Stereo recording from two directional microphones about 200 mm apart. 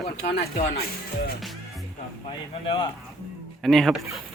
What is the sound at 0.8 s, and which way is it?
Speech, 50° left (ahead or behind).